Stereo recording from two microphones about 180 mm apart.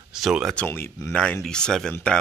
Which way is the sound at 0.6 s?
10° left (ahead or behind).